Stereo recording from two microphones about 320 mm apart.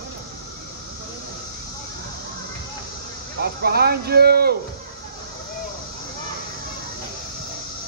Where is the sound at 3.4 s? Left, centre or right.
Right.